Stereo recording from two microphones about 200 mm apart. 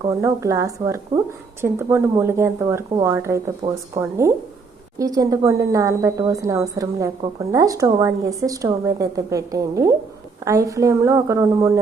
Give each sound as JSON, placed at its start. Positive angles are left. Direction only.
{"t": 0.2, "sound": "a woman's voice", "side_deg": -15}